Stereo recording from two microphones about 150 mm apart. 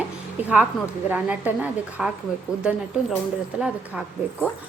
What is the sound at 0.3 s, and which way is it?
A woman's voice, 10° right (ahead or behind).